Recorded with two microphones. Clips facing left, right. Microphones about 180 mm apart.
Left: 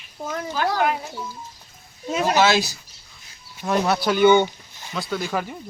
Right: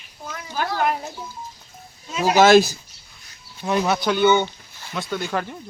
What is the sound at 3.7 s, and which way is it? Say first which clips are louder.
Speech: even; centre (ahead or behind).